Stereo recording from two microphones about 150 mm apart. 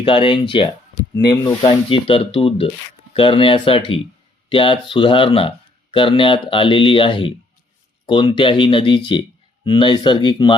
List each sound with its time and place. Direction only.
0.0 s speech: 35° left (ahead or behind)